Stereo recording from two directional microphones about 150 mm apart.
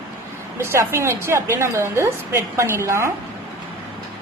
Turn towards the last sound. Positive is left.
turn(degrees=-20)  # may be behind; listen again after turning